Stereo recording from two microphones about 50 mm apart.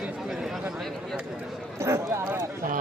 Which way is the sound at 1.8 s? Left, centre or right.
Right.